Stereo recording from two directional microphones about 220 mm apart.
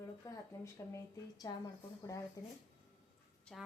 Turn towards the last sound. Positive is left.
turn(degrees=0)  # may be behind; listen again after turning